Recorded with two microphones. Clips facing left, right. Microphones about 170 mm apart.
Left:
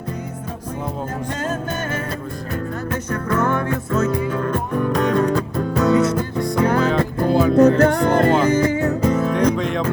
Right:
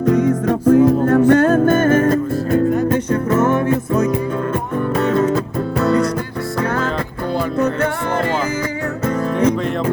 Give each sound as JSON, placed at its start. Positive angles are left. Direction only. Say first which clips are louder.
{"t": 0.1, "sound": "music", "louder": "right 15 dB", "side_deg": -85}
{"t": 1.3, "sound": "music", "louder": "right 13 dB", "side_deg": -60}
{"t": 3.3, "sound": "music", "louder": "right 4 dB", "side_deg": -20}
{"t": 4.9, "sound": "music", "louder": "right 3 dB", "side_deg": -5}
{"t": 7.3, "sound": "music", "louder": "left 6 dB", "side_deg": 40}